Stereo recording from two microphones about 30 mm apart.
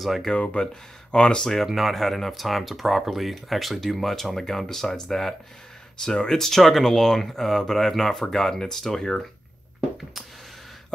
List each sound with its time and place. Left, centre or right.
0.3 s speech: left
1.8 s speech: centre